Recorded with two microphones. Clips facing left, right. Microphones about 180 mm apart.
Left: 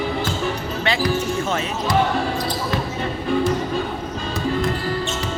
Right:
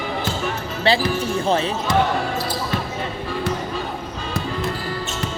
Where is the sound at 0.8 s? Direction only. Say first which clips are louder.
Right 2 dB; 30° right (ahead or behind).